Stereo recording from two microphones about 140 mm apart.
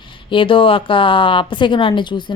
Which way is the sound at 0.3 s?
35° left (ahead or behind).